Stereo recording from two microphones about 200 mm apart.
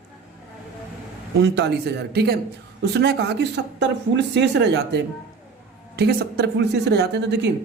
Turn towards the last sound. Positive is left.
turn(degrees=-60)  # may be behind; listen again after turning